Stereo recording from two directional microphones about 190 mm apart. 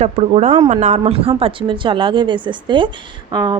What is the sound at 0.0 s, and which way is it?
A woman's voice, 35° right (ahead or behind).